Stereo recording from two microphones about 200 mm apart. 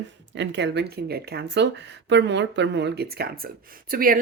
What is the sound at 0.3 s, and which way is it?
Speech, 60° right (ahead or behind).